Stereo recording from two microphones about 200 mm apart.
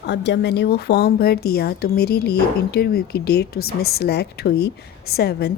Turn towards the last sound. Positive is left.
turn(degrees=55)  # may be behind; listen again after turning